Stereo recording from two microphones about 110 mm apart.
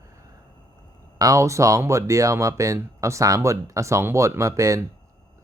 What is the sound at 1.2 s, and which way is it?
Speech, 30° right (ahead or behind).